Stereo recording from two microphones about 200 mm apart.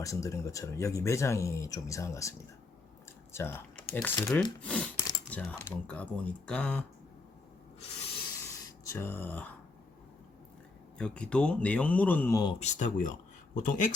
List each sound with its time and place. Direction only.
0.0 s speech: 15° left (ahead or behind)
3.3 s speech: 10° left (ahead or behind)
8.9 s speech: 10° left (ahead or behind)
10.9 s speech: 5° left (ahead or behind)
12.5 s speech: 35° left (ahead or behind)